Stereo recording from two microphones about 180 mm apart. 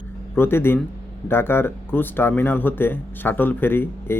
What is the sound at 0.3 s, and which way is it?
Speech, 10° left (ahead or behind).